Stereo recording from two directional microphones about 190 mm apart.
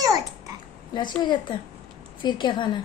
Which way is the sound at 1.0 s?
25° left (ahead or behind).